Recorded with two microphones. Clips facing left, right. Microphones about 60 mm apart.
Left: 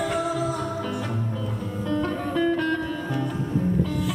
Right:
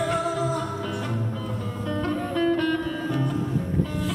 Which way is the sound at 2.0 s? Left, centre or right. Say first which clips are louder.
Even; centre.